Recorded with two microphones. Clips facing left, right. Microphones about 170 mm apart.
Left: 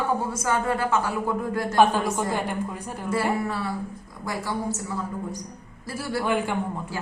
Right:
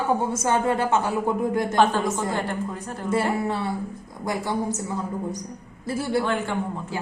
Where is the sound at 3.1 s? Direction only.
25° right (ahead or behind).